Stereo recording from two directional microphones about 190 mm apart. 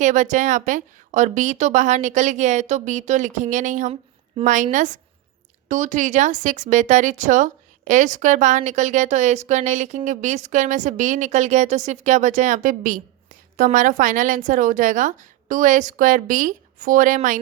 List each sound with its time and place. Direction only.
0.0 s speech: 40° right (ahead or behind)